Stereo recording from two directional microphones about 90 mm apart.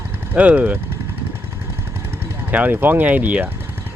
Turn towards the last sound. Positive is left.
turn(degrees=-20)  # may be behind; listen again after turning